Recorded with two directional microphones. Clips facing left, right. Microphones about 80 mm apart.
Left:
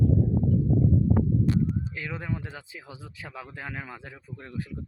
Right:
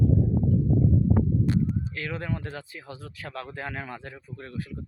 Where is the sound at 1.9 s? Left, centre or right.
Centre.